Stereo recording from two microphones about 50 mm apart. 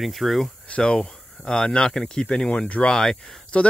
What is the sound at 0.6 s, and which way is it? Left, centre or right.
Speech, centre.